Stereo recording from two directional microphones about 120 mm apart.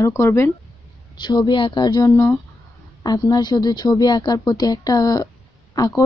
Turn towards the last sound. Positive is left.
turn(degrees=30)  # may be behind; listen again after turning